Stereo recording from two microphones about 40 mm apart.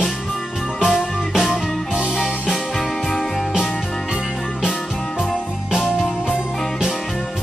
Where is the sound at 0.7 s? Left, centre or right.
Centre.